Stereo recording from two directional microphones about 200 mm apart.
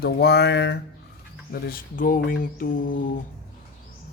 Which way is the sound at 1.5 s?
45° left (ahead or behind).